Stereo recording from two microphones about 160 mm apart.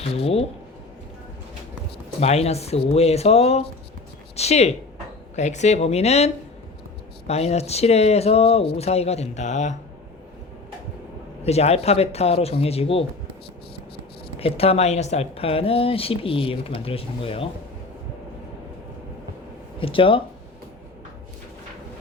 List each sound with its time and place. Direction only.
0.0 s speech: 40° left (ahead or behind)
2.2 s speech: 40° left (ahead or behind)
11.4 s speech: 40° left (ahead or behind)
14.3 s speech: 40° left (ahead or behind)
19.8 s speech: 35° left (ahead or behind)